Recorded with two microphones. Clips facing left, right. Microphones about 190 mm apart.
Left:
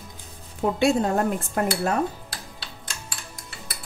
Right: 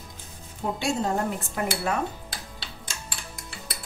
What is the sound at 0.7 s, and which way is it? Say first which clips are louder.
Speech: left 6 dB; 60° left (ahead or behind).